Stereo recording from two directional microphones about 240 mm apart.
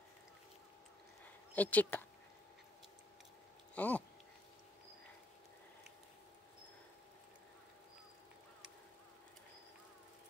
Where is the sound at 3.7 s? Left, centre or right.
Centre.